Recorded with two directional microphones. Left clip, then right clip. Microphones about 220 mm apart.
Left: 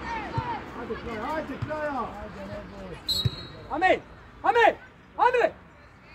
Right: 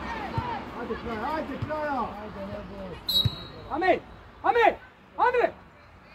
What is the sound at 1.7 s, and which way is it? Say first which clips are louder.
Speech: even; 35° right (ahead or behind).